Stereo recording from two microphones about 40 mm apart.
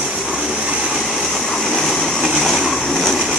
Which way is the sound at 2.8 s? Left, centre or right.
Centre.